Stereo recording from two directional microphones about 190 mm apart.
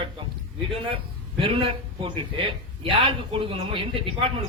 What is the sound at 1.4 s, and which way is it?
Speech, 25° right (ahead or behind).